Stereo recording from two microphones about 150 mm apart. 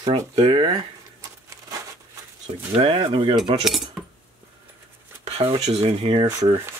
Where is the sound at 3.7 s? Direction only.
Centre (ahead or behind).